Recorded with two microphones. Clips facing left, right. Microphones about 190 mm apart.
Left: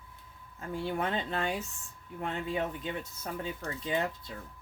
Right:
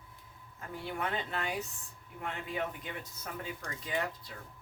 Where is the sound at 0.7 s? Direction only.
30° left (ahead or behind).